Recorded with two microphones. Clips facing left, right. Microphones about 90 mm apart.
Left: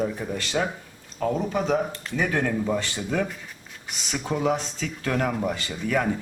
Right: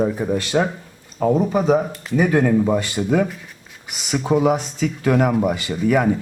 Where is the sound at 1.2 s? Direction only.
15° right (ahead or behind).